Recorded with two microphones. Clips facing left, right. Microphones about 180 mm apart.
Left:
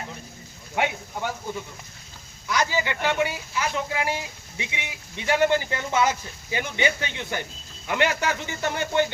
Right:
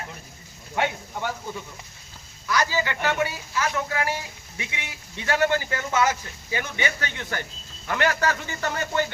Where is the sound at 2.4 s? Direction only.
15° left (ahead or behind).